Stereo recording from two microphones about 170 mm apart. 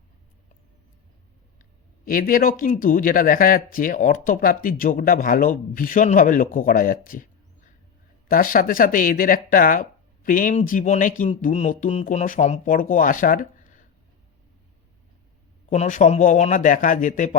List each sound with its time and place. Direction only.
2.0 s speech: 55° left (ahead or behind)
15.7 s speech: 45° left (ahead or behind)